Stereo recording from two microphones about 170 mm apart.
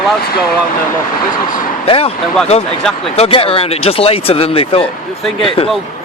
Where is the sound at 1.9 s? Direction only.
35° left (ahead or behind).